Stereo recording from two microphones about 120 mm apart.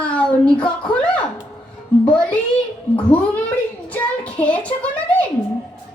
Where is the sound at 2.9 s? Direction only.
10° left (ahead or behind).